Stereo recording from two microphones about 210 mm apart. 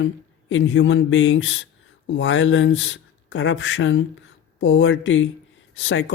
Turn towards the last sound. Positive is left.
turn(degrees=65)  # may be behind; listen again after turning